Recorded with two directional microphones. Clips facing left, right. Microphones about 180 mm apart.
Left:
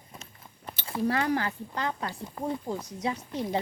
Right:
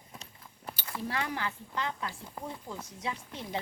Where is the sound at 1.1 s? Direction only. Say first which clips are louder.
Left 7 dB; 40° left (ahead or behind).